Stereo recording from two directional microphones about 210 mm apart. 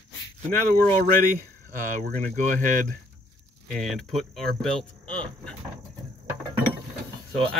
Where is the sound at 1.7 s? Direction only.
40° right (ahead or behind).